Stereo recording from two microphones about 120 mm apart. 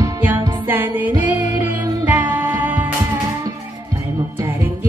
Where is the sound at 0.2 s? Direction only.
15° right (ahead or behind).